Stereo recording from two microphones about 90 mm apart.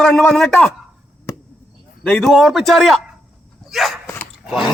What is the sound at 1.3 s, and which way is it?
Chop, 35° left (ahead or behind).